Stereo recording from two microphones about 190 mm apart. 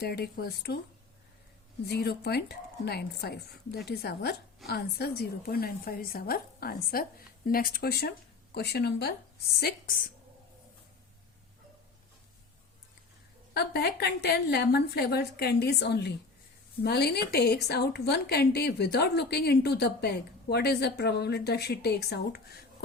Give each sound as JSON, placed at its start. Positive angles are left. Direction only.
{"t": 0.0, "sound": "speech", "side_deg": 55}
{"t": 1.9, "sound": "speech", "side_deg": 60}
{"t": 13.5, "sound": "speech", "side_deg": 60}